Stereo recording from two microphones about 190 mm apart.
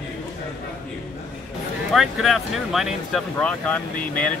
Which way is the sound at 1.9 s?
Centre (ahead or behind).